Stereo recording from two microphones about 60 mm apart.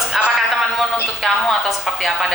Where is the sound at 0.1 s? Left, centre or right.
Centre.